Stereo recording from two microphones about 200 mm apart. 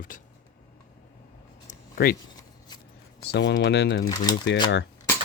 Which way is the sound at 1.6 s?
50° left (ahead or behind).